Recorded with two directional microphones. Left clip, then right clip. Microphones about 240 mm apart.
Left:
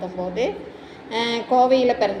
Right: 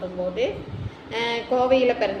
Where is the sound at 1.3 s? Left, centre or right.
Centre.